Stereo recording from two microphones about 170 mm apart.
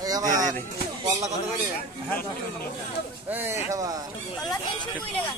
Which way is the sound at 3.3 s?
15° right (ahead or behind).